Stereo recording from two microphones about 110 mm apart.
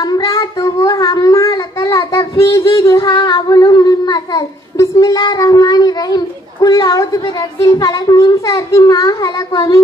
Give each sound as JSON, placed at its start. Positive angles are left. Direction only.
{"t": 0.0, "sound": "child singing", "side_deg": 35}